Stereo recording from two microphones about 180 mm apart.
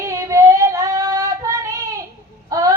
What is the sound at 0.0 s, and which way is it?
Female singing, 15° right (ahead or behind).